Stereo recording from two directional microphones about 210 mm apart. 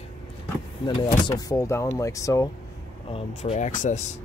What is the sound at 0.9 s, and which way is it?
Speech, 20° left (ahead or behind).